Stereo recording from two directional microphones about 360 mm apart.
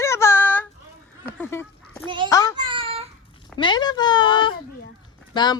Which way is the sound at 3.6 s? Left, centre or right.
Centre.